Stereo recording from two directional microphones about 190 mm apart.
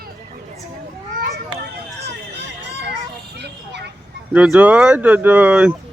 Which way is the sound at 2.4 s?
65° right (ahead or behind).